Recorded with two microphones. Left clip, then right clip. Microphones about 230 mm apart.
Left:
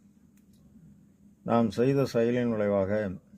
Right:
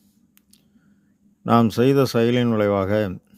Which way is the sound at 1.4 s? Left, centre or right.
Right.